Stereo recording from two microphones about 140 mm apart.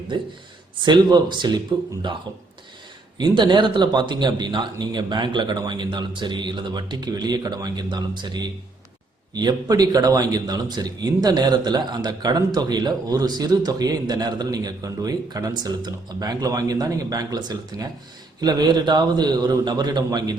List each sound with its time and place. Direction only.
0.1 s a man's voice: 35° right (ahead or behind)
3.2 s a man's voice: 35° right (ahead or behind)